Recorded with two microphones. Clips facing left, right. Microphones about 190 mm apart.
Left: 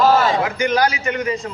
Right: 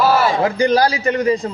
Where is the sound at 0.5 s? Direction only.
35° right (ahead or behind).